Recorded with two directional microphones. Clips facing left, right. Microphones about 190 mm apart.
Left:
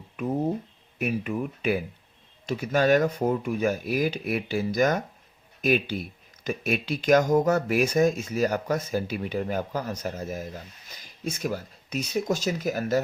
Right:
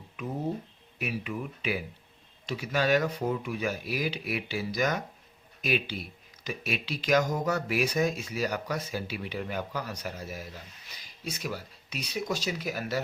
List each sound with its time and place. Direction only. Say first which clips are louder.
0.2 s speech: left 6 dB; 50° left (ahead or behind)